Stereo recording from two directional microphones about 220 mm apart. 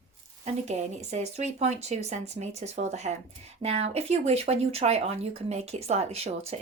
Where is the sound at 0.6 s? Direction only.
30° right (ahead or behind).